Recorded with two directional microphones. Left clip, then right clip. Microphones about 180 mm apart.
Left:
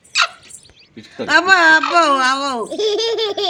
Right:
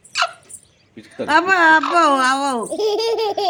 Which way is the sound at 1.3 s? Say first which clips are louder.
Left 2 dB; 70° right (ahead or behind).